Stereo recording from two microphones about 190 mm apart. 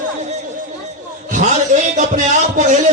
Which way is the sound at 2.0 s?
40° right (ahead or behind).